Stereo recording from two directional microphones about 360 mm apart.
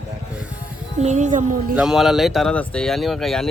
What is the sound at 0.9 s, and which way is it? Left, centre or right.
Speech, centre.